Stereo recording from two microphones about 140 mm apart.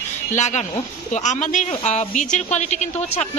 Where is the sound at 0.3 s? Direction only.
55° left (ahead or behind).